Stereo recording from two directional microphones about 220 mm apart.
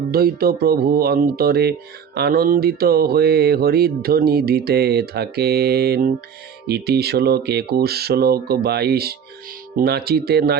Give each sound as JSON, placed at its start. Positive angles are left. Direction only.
{"t": 0.1, "sound": "speech", "side_deg": -45}